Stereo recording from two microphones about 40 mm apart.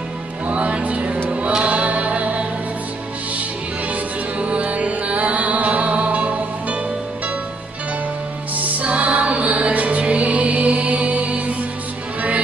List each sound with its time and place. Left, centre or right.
0.5 s music: right
3.9 s music: right
8.5 s music: right